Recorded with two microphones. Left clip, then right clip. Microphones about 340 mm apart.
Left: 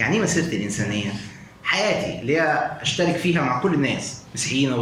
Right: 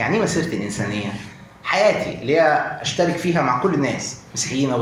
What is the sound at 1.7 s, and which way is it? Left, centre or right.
A man's voice, centre.